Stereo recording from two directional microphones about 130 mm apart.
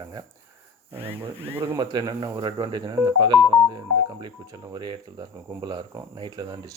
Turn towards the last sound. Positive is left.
turn(degrees=-30)  # may be behind; listen again after turning